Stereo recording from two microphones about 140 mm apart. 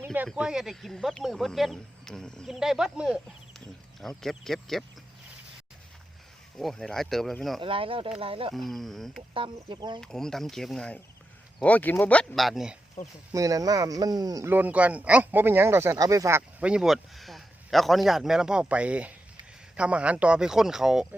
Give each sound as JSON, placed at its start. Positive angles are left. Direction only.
{"t": 0.0, "sound": "a sound", "side_deg": -10}
{"t": 0.3, "sound": "speech", "side_deg": -5}
{"t": 6.6, "sound": "speech", "side_deg": 0}
{"t": 7.6, "sound": "speech", "side_deg": -40}
{"t": 8.5, "sound": "speech", "side_deg": 0}
{"t": 9.3, "sound": "speech", "side_deg": -35}
{"t": 10.0, "sound": "speech", "side_deg": 5}
{"t": 13.3, "sound": "speech", "side_deg": -25}
{"t": 14.5, "sound": "speech", "side_deg": -10}
{"t": 16.6, "sound": "speech", "side_deg": -5}